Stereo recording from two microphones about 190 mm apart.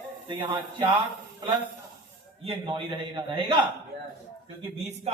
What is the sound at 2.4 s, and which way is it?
A man's voice, 25° right (ahead or behind).